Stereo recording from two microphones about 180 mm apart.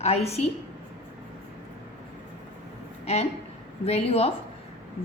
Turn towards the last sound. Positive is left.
turn(degrees=35)  # may be behind; listen again after turning